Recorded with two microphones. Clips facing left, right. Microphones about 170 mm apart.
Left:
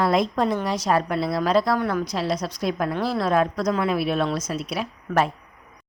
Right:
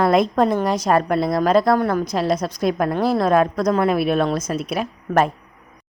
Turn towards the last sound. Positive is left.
turn(degrees=-50)  # may be behind; listen again after turning